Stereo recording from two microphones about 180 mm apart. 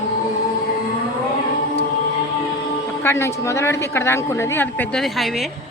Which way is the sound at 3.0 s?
15° left (ahead or behind).